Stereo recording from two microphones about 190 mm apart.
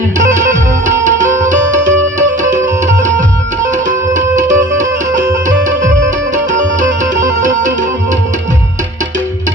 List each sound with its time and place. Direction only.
1.0 s music: 40° right (ahead or behind)
6.3 s music: 40° right (ahead or behind)